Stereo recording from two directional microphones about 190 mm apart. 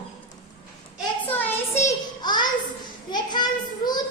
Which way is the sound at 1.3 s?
10° left (ahead or behind).